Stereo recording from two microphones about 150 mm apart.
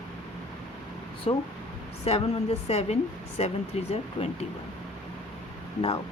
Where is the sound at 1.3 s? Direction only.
40° left (ahead or behind).